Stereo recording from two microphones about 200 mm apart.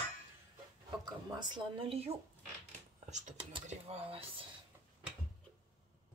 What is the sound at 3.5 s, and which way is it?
Speech, 30° right (ahead or behind).